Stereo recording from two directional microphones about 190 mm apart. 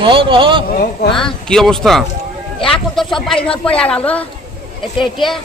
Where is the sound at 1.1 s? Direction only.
5° left (ahead or behind).